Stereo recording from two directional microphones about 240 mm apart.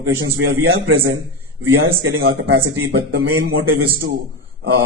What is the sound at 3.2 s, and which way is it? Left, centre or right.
Speech, right.